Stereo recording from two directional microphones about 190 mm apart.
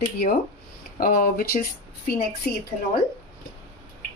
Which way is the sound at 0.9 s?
50° left (ahead or behind).